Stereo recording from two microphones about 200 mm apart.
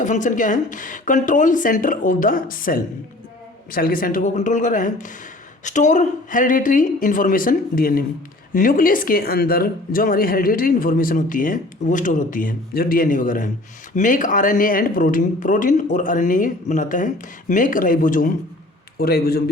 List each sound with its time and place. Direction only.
0.0 s a woman's voice: 40° left (ahead or behind)